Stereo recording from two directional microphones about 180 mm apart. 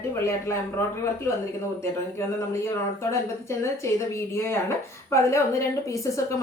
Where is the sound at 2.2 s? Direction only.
15° left (ahead or behind).